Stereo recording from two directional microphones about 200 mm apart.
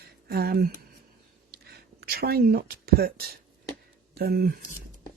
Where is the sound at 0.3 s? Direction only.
50° right (ahead or behind).